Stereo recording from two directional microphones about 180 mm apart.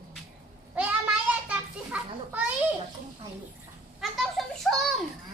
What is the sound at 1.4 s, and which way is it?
A child's voice, 5° right (ahead or behind).